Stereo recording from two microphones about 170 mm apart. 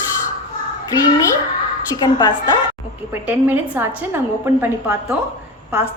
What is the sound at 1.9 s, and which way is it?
Speech, 20° left (ahead or behind).